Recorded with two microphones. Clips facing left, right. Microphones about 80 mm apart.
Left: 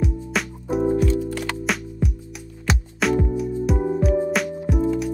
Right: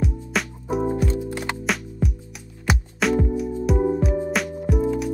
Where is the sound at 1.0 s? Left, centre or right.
Right.